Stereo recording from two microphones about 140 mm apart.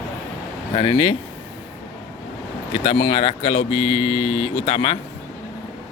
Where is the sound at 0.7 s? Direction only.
40° left (ahead or behind).